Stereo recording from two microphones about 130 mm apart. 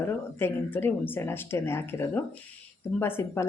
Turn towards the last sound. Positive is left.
turn(degrees=20)  # may be behind; listen again after turning